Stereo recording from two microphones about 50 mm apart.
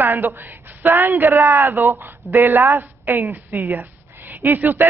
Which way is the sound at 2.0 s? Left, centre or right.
Right.